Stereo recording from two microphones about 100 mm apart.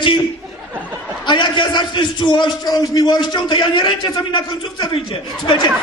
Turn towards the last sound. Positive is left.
turn(degrees=50)  # may be behind; listen again after turning